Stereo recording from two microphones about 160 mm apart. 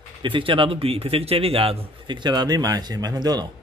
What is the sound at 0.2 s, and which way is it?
A man's voice, 30° right (ahead or behind).